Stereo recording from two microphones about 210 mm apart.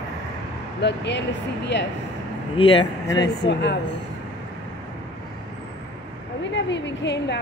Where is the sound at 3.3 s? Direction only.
55° left (ahead or behind).